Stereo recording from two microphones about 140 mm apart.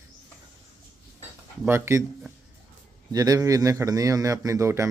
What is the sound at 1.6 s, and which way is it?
Speech, 15° right (ahead or behind).